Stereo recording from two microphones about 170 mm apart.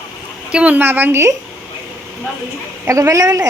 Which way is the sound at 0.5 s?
10° right (ahead or behind).